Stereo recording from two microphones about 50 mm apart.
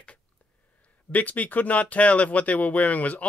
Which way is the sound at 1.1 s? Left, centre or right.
Left.